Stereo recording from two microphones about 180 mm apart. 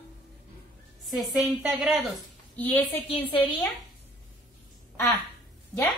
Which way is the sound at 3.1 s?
25° left (ahead or behind).